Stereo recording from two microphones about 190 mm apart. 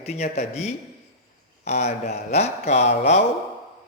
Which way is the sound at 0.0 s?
35° left (ahead or behind).